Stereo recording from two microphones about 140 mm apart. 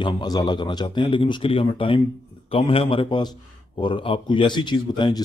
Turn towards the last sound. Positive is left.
turn(degrees=30)  # may be behind; listen again after turning